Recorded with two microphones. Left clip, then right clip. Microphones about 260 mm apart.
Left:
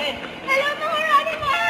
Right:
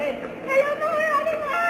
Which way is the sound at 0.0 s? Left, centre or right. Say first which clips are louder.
Left 1 dB; centre.